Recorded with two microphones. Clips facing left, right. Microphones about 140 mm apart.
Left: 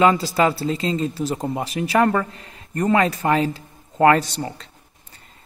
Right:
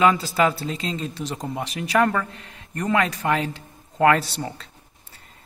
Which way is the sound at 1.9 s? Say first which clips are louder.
Left 2 dB; 35° left (ahead or behind).